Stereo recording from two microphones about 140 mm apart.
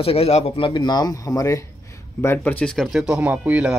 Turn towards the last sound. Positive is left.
turn(degrees=-10)  # may be behind; listen again after turning